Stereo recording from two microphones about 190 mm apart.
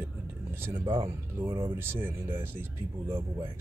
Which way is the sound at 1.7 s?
10° right (ahead or behind).